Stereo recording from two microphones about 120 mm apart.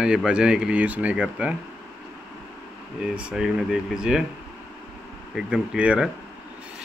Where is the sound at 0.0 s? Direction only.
5° right (ahead or behind).